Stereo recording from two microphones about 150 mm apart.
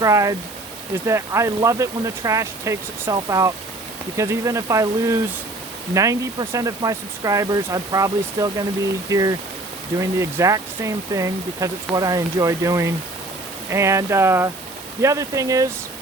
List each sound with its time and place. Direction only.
0.0 s speech: 20° right (ahead or behind)